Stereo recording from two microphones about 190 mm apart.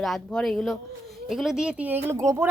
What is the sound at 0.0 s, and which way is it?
A woman's voice, 5° left (ahead or behind).